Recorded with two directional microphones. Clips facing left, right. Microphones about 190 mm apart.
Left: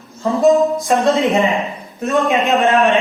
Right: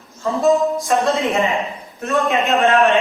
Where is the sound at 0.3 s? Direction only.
15° left (ahead or behind).